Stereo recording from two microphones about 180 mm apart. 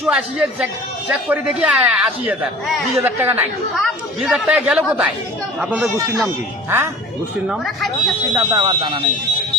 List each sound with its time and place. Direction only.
0.1 s speech: 5° right (ahead or behind)
3.8 s speech: centre (ahead or behind)
6.2 s speech: 15° right (ahead or behind)
7.4 s speech: centre (ahead or behind)
8.4 s speech: 20° right (ahead or behind)